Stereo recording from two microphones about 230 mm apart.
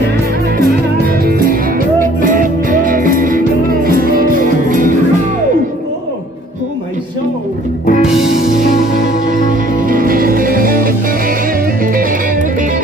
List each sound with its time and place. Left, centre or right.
0.7 s music: right
9.3 s music: right